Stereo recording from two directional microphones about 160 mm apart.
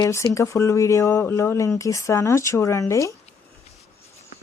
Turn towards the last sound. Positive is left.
turn(degrees=20)  # may be behind; listen again after turning